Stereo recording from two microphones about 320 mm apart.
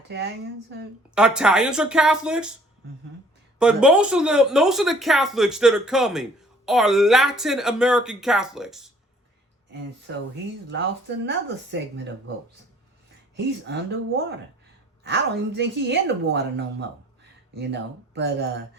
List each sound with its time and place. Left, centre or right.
0.1 s speech: right
1.1 s a woman's voice: centre
3.6 s a woman's voice: centre
10.1 s speech: right
11.3 s speech: right
13.3 s speech: right